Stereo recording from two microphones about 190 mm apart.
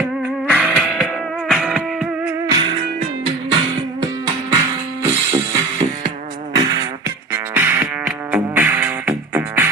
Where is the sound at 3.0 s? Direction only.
30° right (ahead or behind).